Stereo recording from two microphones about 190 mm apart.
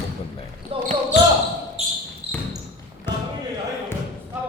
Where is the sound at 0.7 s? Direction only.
30° right (ahead or behind).